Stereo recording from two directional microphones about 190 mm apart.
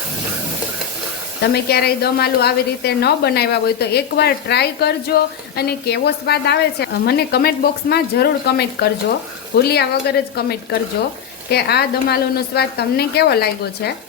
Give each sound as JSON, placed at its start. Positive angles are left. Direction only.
{"t": 1.4, "sound": "a woman's voice", "side_deg": 60}